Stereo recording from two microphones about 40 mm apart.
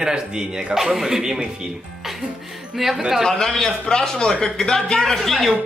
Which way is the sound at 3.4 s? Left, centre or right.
Centre.